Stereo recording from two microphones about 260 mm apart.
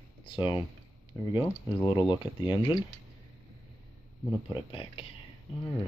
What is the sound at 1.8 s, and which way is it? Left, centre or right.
Speech, centre.